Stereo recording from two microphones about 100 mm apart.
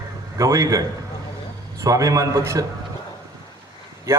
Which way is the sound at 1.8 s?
35° right (ahead or behind).